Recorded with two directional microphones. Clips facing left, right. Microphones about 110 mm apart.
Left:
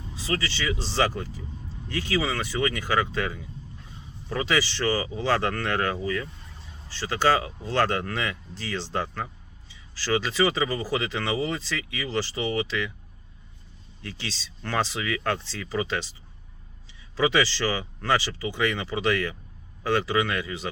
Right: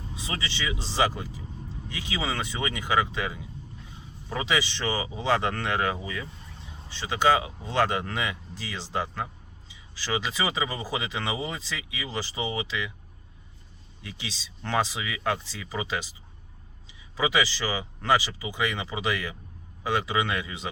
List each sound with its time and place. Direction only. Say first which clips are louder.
0.2 s speech: left 4 dB; 20° right (ahead or behind)
14.0 s speech: left 3 dB; 15° right (ahead or behind)
17.2 s speech: left 3 dB; 15° right (ahead or behind)